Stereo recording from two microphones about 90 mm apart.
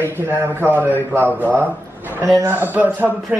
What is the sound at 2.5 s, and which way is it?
Speech, 20° right (ahead or behind).